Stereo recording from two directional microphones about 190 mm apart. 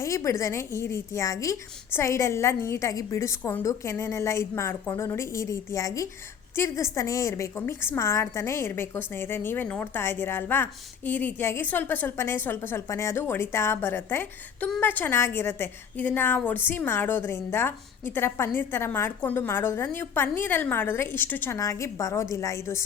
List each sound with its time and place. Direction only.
0.0 s a woman's voice: 15° left (ahead or behind)